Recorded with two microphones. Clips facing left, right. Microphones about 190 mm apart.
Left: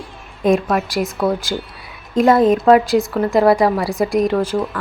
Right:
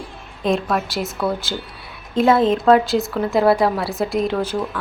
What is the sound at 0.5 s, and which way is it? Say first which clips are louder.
Speech: left 2 dB; centre (ahead or behind).